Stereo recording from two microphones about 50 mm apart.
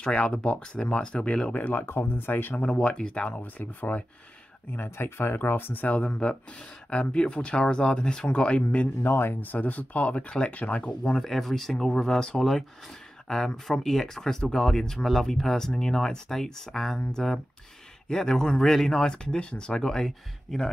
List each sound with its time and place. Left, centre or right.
0.0 s speech: centre
1.5 s speech: left
1.9 s speech: left
2.5 s speech: left
3.3 s speech: left
4.7 s speech: left
5.9 s speech: left
9.0 s speech: left
11.1 s speech: centre